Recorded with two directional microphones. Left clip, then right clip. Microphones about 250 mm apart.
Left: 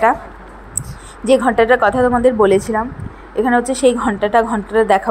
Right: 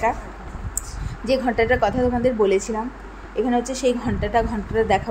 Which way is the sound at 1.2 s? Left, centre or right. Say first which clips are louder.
Left 8 dB; centre.